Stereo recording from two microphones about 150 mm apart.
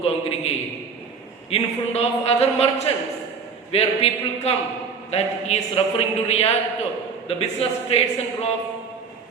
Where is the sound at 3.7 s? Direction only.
40° left (ahead or behind).